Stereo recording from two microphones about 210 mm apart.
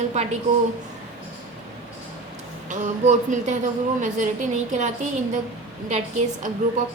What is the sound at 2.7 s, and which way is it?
A woman's voice, 35° right (ahead or behind).